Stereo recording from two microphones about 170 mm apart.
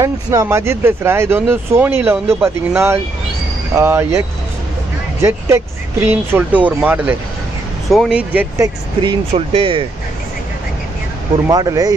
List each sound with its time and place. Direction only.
0.0 s speech: 20° right (ahead or behind)
6.0 s speech: 10° right (ahead or behind)
9.0 s speech: 35° right (ahead or behind)
11.4 s speech: 20° right (ahead or behind)